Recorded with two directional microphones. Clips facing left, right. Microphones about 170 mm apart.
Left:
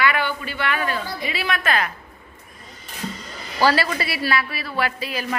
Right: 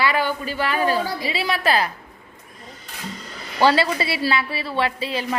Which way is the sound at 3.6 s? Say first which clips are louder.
Right 2 dB; 25° right (ahead or behind).